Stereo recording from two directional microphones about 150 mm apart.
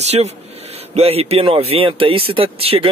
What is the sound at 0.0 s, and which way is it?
Speech, 45° right (ahead or behind).